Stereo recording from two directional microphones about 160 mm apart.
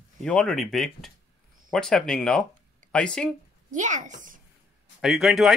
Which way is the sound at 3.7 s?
50° right (ahead or behind).